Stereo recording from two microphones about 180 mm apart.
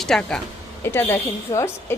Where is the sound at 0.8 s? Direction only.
15° left (ahead or behind).